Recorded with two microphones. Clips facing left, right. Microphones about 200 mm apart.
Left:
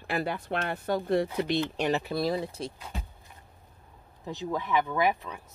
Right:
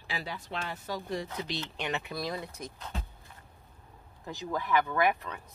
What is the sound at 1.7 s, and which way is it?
Speech, 35° left (ahead or behind).